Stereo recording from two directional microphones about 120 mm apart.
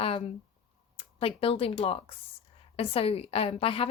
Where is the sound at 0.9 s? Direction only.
50° left (ahead or behind).